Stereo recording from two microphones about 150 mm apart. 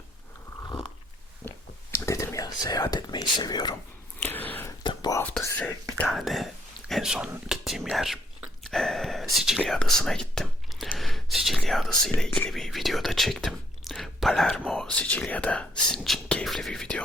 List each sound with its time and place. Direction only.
2.0 s speech: 20° left (ahead or behind)
4.2 s a sound: 10° left (ahead or behind)
4.8 s whispering: 30° left (ahead or behind)
5.4 s speech: 15° left (ahead or behind); by 8.2 s centre (ahead or behind)
8.7 s a sound: centre (ahead or behind)
9.3 s speech: 5° right (ahead or behind)